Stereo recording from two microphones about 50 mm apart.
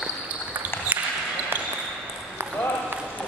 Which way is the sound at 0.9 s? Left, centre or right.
Right.